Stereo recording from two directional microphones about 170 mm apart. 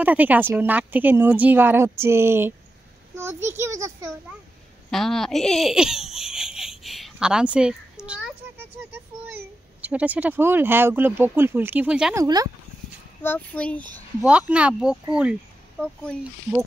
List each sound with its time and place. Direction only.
0.0 s a woman's voice: 10° right (ahead or behind)
4.9 s speech: centre (ahead or behind)
12.2 s speech: 20° right (ahead or behind)
13.2 s a child's voice: 10° left (ahead or behind)
14.5 s speech: 5° right (ahead or behind)
15.8 s speech: 5° left (ahead or behind)